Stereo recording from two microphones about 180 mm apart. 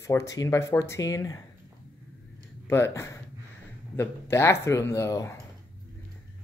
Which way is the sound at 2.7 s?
15° left (ahead or behind).